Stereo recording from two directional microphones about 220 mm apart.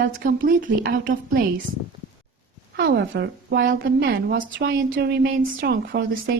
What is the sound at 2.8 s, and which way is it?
A woman's voice, 55° right (ahead or behind).